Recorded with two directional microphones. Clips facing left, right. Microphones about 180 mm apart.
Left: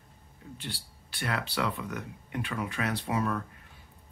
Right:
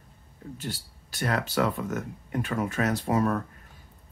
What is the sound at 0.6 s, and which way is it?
Speech, 45° right (ahead or behind).